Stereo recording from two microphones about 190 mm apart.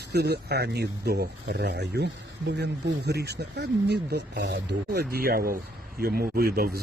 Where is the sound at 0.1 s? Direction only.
60° right (ahead or behind).